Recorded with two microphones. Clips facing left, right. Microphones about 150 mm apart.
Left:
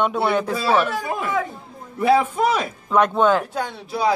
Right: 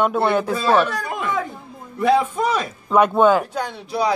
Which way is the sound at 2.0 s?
5° left (ahead or behind).